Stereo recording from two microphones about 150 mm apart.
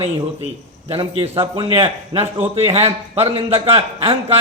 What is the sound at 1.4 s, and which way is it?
A man's voice, 40° right (ahead or behind).